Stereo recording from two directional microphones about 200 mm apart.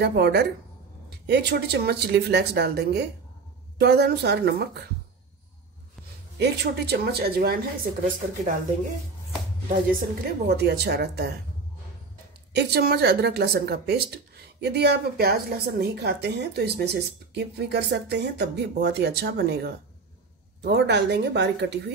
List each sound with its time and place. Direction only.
0.0 s speech: 55° right (ahead or behind)
6.3 s a woman's voice: 55° right (ahead or behind)
9.8 s speech: 45° right (ahead or behind)
12.5 s speech: 55° right (ahead or behind)